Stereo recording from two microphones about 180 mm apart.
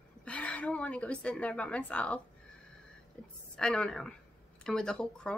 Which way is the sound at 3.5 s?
5° left (ahead or behind).